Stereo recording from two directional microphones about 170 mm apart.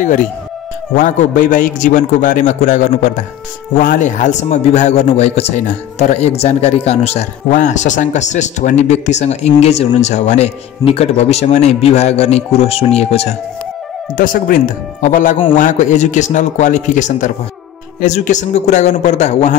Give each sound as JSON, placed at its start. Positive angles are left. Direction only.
{"t": 0.0, "sound": "a man's voice", "side_deg": 45}
{"t": 14.1, "sound": "a man's voice", "side_deg": 55}